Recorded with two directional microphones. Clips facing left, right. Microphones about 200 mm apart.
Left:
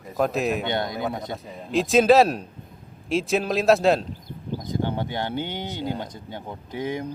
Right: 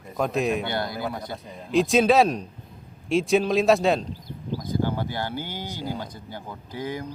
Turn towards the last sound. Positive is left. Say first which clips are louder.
# left 3 dB
turn(degrees=25)  # may be behind; listen again after turning